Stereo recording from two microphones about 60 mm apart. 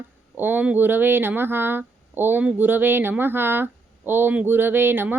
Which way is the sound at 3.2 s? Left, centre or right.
Right.